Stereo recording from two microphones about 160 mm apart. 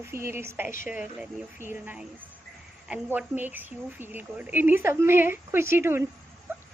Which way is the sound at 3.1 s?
10° right (ahead or behind).